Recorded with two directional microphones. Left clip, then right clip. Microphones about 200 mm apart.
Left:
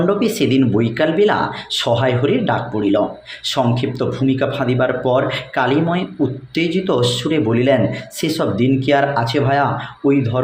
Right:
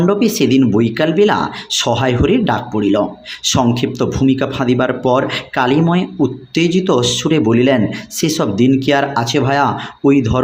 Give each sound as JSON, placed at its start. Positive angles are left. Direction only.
{"t": 0.0, "sound": "speech", "side_deg": -20}